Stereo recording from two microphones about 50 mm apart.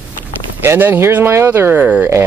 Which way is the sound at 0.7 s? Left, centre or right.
Right.